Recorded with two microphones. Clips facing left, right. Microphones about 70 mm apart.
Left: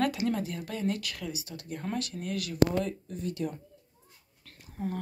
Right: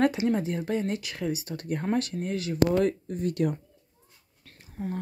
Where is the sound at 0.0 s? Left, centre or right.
Right.